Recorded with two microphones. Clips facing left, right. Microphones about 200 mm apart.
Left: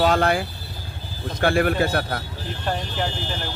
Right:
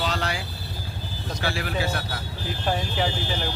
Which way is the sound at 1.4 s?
55° left (ahead or behind).